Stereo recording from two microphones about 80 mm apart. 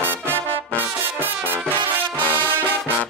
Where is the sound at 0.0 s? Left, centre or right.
Right.